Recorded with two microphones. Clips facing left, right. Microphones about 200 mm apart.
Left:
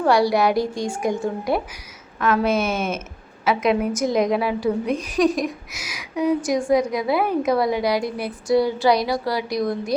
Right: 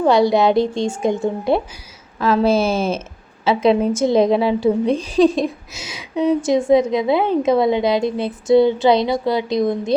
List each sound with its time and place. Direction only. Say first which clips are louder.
0.0 s a woman's voice: right 4 dB; 20° right (ahead or behind)